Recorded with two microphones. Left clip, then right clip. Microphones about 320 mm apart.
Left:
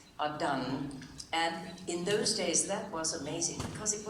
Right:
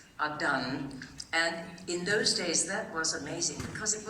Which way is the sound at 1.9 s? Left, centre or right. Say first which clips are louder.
Right 3 dB; centre.